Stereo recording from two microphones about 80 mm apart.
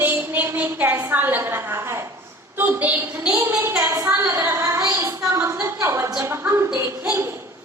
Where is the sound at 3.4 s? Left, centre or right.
Right.